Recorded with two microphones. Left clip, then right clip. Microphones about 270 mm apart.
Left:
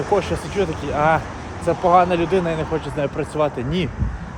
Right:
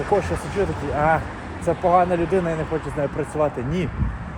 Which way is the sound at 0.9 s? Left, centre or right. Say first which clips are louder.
Left 2 dB; centre.